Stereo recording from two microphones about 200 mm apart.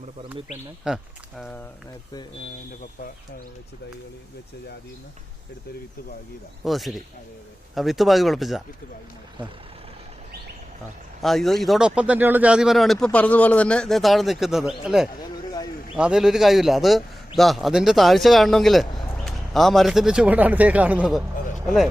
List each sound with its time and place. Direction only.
0.9 s speech: 5° right (ahead or behind)
6.7 s speech: centre (ahead or behind)
11.2 s speech: centre (ahead or behind)
18.9 s a sound: 20° left (ahead or behind)
19.1 s a man's voice: centre (ahead or behind)